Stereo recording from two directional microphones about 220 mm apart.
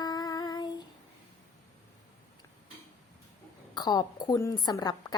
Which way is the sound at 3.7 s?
20° left (ahead or behind).